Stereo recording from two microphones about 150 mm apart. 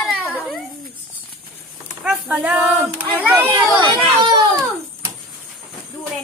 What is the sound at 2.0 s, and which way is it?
Speech, 10° right (ahead or behind).